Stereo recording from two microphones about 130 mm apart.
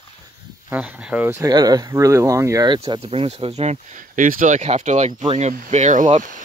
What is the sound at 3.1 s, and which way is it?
Speech, 50° right (ahead or behind).